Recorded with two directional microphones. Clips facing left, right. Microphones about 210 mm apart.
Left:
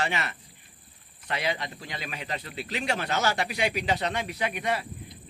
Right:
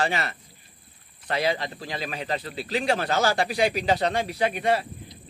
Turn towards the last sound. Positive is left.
turn(degrees=-30)  # may be behind; listen again after turning